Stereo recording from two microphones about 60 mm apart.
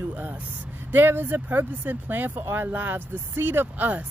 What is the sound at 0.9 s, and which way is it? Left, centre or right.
Speech, right.